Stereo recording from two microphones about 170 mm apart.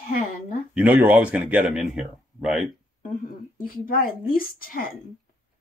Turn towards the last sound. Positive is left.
turn(degrees=60)  # may be behind; listen again after turning